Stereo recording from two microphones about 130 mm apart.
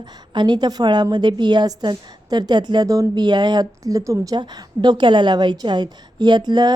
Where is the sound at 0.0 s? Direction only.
35° right (ahead or behind).